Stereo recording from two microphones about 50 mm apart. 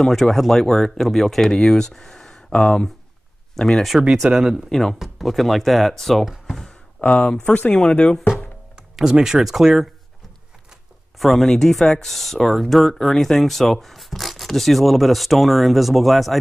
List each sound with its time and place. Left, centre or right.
0.0 s speech: centre
4.2 s speech: centre
4.6 s speech: centre
7.0 s speech: left
8.9 s speech: centre
11.1 s speech: centre